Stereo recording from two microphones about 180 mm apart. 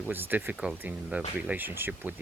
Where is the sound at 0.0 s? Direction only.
10° right (ahead or behind).